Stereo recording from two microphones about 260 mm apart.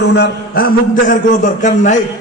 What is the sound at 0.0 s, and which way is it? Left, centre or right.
A man's voice, left.